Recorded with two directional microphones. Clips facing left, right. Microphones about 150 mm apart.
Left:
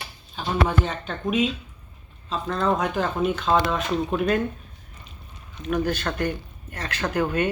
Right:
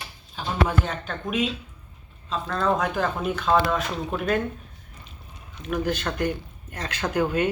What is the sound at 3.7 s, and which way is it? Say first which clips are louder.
Speech: left 2 dB; 10° left (ahead or behind).